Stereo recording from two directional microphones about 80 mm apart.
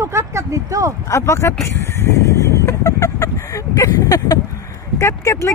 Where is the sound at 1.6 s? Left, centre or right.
Left.